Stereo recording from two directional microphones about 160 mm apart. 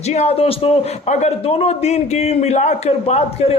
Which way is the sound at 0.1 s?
40° left (ahead or behind).